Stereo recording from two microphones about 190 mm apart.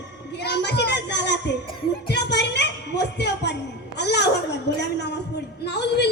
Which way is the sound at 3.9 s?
60° left (ahead or behind).